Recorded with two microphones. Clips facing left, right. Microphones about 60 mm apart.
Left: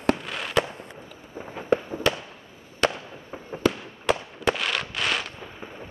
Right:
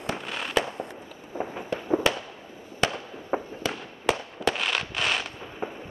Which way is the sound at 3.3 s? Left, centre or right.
Right.